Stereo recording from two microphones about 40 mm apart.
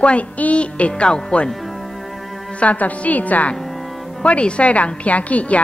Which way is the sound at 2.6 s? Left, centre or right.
Left.